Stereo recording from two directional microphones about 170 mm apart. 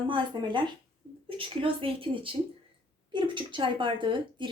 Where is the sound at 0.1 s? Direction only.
30° right (ahead or behind).